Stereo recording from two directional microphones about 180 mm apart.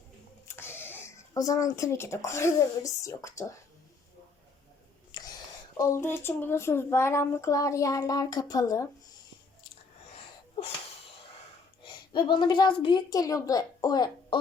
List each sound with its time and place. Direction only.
0.4 s speech: 15° left (ahead or behind)
5.1 s whispering: 25° left (ahead or behind)
5.7 s speech: 15° left (ahead or behind)
10.5 s wheeze: 35° left (ahead or behind)
11.8 s a woman's voice: 25° left (ahead or behind)